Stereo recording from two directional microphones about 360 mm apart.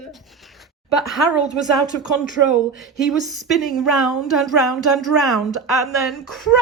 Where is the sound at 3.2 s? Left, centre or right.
Centre.